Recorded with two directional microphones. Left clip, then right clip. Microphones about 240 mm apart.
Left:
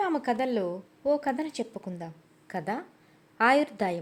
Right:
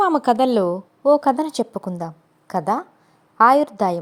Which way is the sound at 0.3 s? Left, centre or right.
Right.